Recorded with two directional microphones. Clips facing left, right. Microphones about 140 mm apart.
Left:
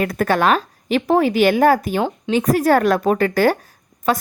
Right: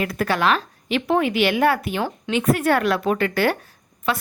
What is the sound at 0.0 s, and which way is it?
A woman's voice, 45° left (ahead or behind).